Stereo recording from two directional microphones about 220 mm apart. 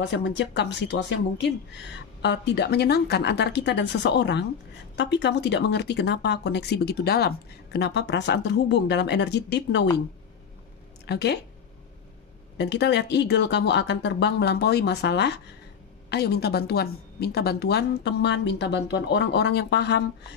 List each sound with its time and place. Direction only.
0.1 s speech: 55° left (ahead or behind)
11.1 s speech: 50° left (ahead or behind)
12.5 s speech: 50° left (ahead or behind)